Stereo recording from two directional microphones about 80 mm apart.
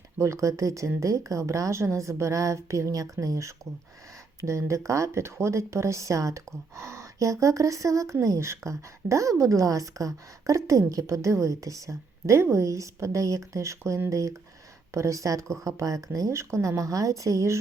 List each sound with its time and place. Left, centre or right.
0.2 s a woman's voice: right